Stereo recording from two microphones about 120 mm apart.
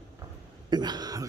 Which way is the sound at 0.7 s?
35° right (ahead or behind).